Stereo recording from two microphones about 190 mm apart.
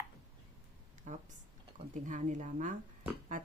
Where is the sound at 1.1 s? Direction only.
40° right (ahead or behind).